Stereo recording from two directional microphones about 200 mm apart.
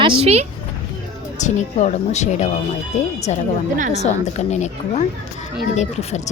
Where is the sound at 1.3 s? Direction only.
35° left (ahead or behind).